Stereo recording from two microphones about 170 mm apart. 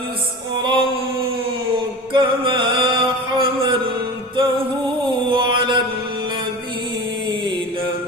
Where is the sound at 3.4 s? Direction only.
30° right (ahead or behind).